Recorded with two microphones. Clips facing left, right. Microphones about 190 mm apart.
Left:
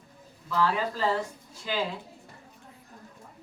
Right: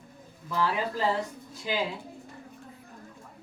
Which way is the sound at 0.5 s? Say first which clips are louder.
Left 1 dB; 15° right (ahead or behind).